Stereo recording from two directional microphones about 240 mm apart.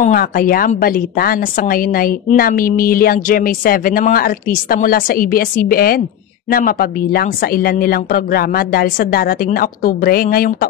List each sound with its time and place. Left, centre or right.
0.0 s a woman's voice: left